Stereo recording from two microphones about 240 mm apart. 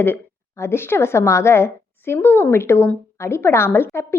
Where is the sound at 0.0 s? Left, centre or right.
Centre.